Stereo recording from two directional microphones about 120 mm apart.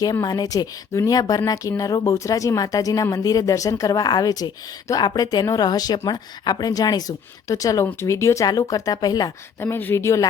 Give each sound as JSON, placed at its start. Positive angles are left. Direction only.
{"t": 0.0, "sound": "speech", "side_deg": 30}
{"t": 9.6, "sound": "speech", "side_deg": 20}